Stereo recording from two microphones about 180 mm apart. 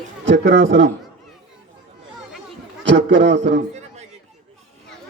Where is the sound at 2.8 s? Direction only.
80° right.